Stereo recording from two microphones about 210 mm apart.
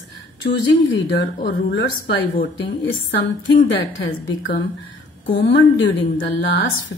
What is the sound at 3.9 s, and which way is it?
A woman's voice, 65° left (ahead or behind).